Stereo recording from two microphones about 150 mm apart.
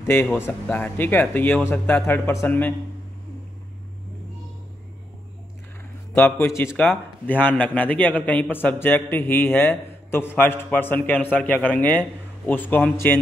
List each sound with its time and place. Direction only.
0.0 s a man's voice: 15° left (ahead or behind)
6.4 s a man's voice: 15° left (ahead or behind)